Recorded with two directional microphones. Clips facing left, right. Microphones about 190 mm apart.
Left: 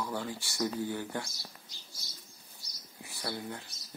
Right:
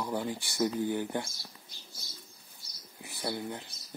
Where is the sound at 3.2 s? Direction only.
20° right (ahead or behind).